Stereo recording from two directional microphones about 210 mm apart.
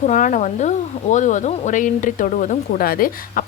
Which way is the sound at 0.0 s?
35° left (ahead or behind).